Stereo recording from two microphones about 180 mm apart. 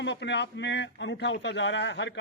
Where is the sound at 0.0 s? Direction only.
75° left (ahead or behind).